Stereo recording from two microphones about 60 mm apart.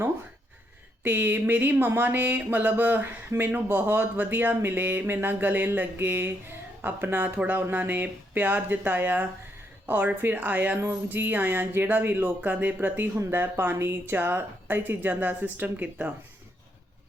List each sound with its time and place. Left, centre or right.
1.0 s a woman's voice: right